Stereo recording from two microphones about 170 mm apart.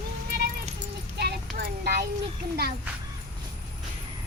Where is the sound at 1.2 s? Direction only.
65° right (ahead or behind).